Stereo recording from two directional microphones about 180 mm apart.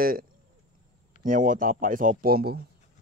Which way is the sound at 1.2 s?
50° right (ahead or behind).